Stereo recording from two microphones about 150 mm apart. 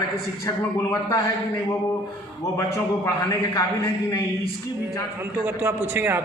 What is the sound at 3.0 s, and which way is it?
A man's voice, 20° left (ahead or behind).